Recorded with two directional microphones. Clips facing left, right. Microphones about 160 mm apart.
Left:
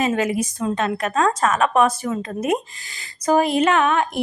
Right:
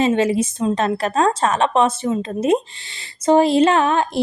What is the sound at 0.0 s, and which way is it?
A woman's voice, 30° right (ahead or behind).